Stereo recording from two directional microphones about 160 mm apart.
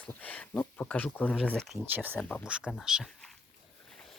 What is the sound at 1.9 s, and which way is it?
Speech, 10° right (ahead or behind).